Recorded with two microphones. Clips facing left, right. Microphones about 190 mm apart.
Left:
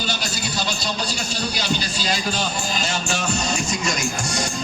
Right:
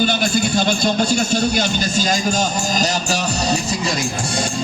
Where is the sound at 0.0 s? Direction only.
55° right (ahead or behind); by 3.9 s 35° right (ahead or behind).